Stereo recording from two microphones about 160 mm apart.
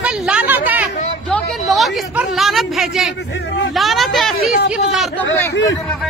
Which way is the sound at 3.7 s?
Centre (ahead or behind).